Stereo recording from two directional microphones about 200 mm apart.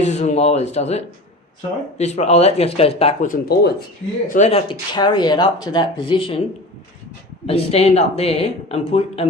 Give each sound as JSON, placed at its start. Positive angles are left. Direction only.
{"t": 0.0, "sound": "speech", "side_deg": 35}
{"t": 3.2, "sound": "speech", "side_deg": 45}
{"t": 7.4, "sound": "speech", "side_deg": 30}